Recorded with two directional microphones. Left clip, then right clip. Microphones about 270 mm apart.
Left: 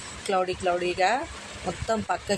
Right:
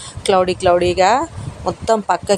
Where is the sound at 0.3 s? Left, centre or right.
Right.